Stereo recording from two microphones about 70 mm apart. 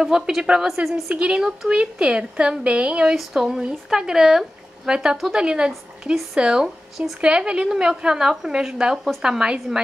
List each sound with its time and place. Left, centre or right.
0.0 s speech: centre
1.1 s speech: centre
3.2 s speech: centre
8.9 s speech: centre
9.2 s speech: centre